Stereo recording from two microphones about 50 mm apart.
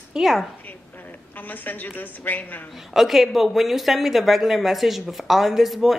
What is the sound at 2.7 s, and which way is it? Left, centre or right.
Speech, centre.